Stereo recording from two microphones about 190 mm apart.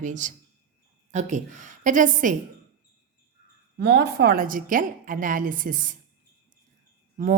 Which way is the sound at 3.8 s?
55° right (ahead or behind).